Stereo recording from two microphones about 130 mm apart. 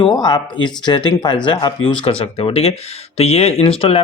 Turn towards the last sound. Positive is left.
turn(degrees=45)  # may be behind; listen again after turning